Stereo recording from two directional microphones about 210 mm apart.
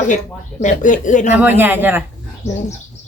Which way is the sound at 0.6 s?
35° left (ahead or behind).